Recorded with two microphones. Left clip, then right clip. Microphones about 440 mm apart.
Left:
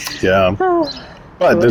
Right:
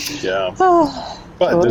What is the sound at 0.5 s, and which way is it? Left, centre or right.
Speech, centre.